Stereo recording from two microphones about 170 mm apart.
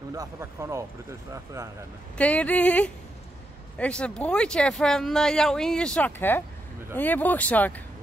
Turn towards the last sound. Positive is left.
turn(degrees=10)  # may be behind; listen again after turning